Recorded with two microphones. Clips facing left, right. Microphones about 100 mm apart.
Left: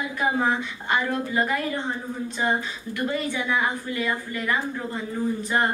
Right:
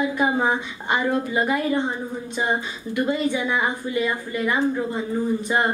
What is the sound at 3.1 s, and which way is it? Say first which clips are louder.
A woman's voice: right 2 dB; 20° right (ahead or behind).